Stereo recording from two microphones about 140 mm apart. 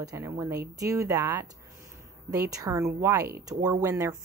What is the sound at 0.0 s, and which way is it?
A woman's voice, 25° right (ahead or behind).